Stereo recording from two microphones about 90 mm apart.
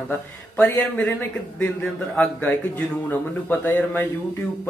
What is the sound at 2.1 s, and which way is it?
Speech, 15° left (ahead or behind).